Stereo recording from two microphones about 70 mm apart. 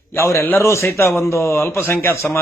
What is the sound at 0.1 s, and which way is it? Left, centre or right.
A man's voice, left.